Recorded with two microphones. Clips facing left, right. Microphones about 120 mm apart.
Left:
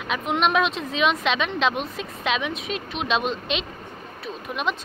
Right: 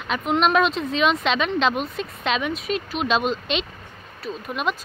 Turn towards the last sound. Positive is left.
turn(degrees=0)  # may be behind; listen again after turning